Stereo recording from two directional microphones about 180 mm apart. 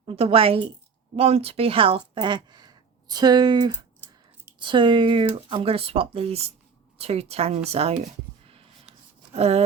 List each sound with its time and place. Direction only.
0.0 s speech: 30° right (ahead or behind)
9.3 s speech: 35° right (ahead or behind)